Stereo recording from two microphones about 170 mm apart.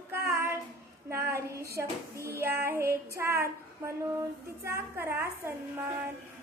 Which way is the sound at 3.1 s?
15° right (ahead or behind).